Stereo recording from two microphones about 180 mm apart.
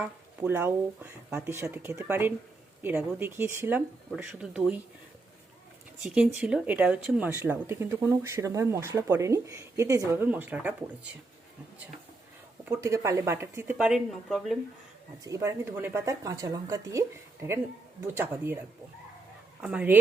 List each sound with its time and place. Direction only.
0.0 s speech: 10° right (ahead or behind)
6.1 s speech: 5° right (ahead or behind)
12.6 s speech: 15° right (ahead or behind)
13.7 s speech: centre (ahead or behind)
15.2 s speech: 15° right (ahead or behind)
19.6 s speech: 5° right (ahead or behind)